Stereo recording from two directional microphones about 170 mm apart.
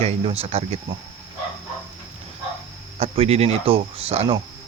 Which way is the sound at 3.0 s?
35° right (ahead or behind).